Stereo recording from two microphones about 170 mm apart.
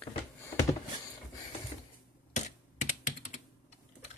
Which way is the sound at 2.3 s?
45° left (ahead or behind).